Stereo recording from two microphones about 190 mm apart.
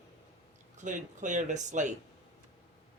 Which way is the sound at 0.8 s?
40° right (ahead or behind).